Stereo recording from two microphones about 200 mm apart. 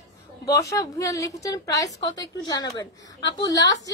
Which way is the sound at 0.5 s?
15° left (ahead or behind).